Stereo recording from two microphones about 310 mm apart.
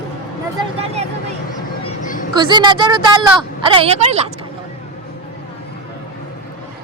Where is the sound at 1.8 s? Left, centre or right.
Left.